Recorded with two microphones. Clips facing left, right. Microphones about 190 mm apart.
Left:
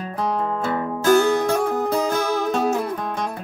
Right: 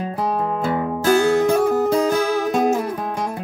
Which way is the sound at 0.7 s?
20° right (ahead or behind).